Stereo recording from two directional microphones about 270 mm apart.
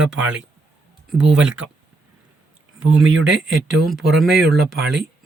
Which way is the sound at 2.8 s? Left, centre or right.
Right.